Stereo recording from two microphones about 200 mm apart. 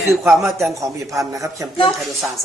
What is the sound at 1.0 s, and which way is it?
Speech, 15° right (ahead or behind).